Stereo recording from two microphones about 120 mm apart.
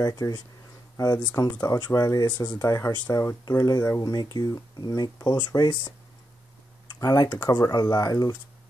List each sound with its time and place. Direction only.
0.0 s speech: 30° left (ahead or behind)
2.6 s speech: 25° left (ahead or behind)
7.0 s speech: 30° left (ahead or behind)